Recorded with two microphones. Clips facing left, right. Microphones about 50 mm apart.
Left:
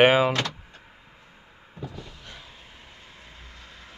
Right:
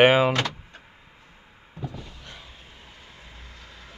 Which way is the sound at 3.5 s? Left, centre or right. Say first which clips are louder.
Even; left.